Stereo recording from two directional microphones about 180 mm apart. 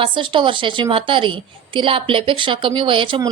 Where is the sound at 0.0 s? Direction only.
25° right (ahead or behind).